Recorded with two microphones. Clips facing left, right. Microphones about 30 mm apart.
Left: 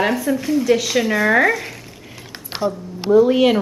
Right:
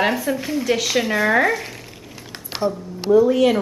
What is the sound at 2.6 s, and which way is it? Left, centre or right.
Speech, right.